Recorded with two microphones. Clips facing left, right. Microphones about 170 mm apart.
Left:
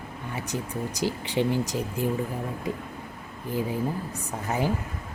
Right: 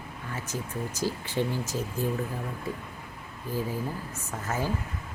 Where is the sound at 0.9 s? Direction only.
15° left (ahead or behind).